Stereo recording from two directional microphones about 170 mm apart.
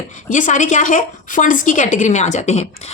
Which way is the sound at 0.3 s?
45° left (ahead or behind).